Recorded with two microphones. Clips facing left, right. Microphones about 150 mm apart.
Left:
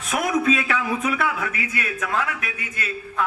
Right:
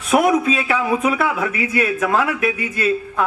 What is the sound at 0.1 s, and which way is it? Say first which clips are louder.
A man's voice: right 6 dB; 30° right (ahead or behind).